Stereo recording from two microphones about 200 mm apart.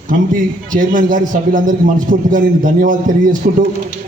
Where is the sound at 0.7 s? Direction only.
40° right (ahead or behind).